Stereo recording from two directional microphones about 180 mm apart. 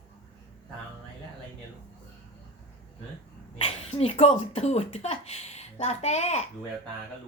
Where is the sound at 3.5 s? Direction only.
35° left (ahead or behind).